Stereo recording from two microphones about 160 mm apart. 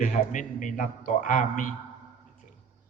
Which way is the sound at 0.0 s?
50° left (ahead or behind).